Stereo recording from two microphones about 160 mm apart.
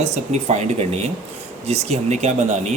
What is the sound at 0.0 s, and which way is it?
Speech, 45° right (ahead or behind).